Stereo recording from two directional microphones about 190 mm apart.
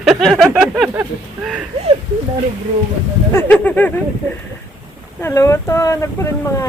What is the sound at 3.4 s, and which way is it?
Speech, 10° left (ahead or behind).